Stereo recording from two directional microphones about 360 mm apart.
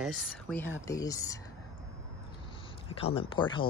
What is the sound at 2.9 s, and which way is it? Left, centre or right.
Speech, centre.